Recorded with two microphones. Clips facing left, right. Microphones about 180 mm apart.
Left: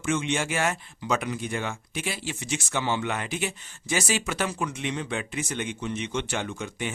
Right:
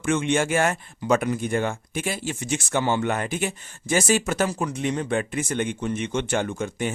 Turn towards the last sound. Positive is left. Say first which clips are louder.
# right 5 dB
turn(degrees=-45)  # may be behind; listen again after turning